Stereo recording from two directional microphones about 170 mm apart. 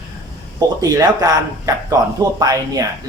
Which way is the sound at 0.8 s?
20° right (ahead or behind).